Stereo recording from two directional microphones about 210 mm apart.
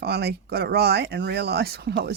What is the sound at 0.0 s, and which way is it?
Speech, 50° right (ahead or behind).